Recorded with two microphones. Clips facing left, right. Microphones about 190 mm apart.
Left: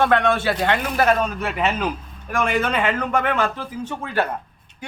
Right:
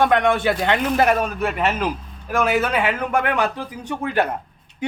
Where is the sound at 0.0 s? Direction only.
15° right (ahead or behind).